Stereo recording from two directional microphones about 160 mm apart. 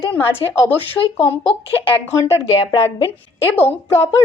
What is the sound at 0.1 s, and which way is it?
A woman's voice, 15° left (ahead or behind).